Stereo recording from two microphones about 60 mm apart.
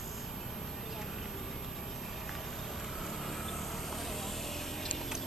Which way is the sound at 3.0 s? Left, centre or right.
Centre.